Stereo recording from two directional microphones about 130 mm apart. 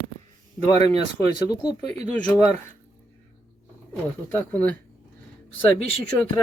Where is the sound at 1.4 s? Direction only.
30° left (ahead or behind).